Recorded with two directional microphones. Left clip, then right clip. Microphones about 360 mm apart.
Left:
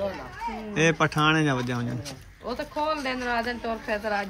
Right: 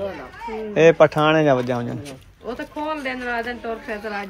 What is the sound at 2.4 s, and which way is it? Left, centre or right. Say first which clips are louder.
Speech: right 1 dB; left.